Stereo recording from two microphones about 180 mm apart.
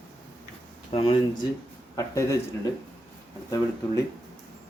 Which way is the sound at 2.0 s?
15° left (ahead or behind).